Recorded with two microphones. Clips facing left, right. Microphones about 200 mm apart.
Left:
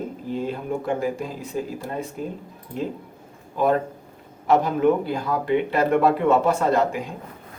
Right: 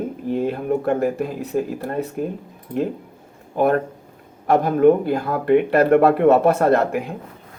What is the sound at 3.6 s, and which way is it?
Speech, 60° right (ahead or behind).